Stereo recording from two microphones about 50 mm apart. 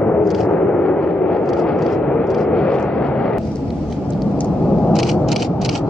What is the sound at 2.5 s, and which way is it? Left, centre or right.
Vehicle, centre.